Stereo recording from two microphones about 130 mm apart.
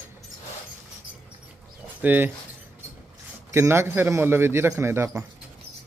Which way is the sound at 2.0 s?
15° right (ahead or behind).